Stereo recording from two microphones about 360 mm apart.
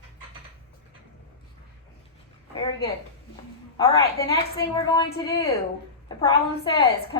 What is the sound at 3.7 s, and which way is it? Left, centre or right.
A woman's voice, centre.